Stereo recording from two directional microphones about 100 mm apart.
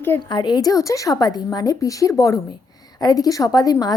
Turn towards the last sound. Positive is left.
turn(degrees=40)  # may be behind; listen again after turning